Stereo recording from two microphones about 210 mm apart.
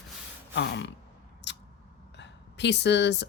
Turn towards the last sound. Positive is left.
turn(degrees=55)  # may be behind; listen again after turning